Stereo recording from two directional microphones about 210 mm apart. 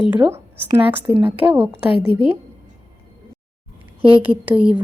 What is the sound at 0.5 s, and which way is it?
A woman's voice, 10° right (ahead or behind).